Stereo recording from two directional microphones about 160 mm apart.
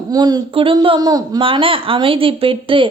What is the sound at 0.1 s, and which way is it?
Speech, 25° right (ahead or behind).